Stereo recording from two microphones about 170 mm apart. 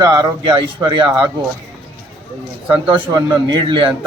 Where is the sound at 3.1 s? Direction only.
25° right (ahead or behind).